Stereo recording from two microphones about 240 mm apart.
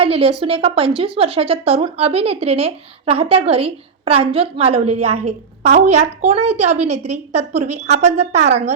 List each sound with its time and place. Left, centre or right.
0.0 s speech: right